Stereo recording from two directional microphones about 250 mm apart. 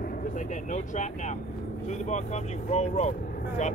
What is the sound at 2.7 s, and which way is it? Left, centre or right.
Speech, left.